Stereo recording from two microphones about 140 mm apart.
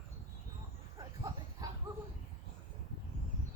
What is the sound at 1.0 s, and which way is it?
Livestock, 25° right (ahead or behind).